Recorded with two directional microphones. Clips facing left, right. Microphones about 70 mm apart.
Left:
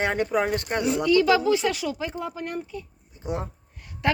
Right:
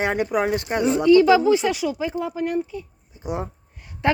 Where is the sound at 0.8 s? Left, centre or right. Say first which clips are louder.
Right 6 dB; right.